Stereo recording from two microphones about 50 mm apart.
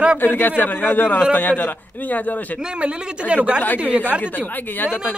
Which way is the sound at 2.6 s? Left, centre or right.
Right.